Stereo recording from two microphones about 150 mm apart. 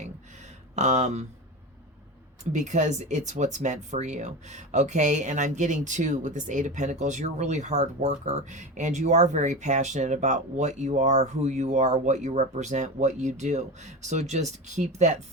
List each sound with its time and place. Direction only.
0.8 s speech: 50° right (ahead or behind)
2.5 s speech: 50° right (ahead or behind)